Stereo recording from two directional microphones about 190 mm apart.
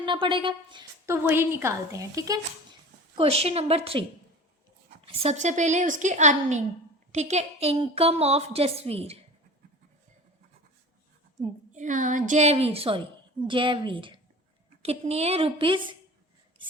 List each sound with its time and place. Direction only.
0.0 s a woman's voice: 25° right (ahead or behind)
3.2 s a woman's voice: 30° right (ahead or behind)
5.0 s a woman's voice: 35° right (ahead or behind)
11.7 s a woman's voice: 40° right (ahead or behind)